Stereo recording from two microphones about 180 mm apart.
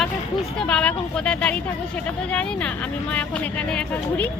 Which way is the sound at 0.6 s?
5° left (ahead or behind).